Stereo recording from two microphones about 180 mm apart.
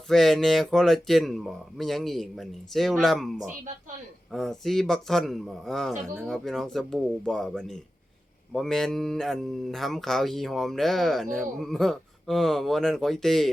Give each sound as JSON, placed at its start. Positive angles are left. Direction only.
{"t": 0.1, "sound": "speech", "side_deg": 0}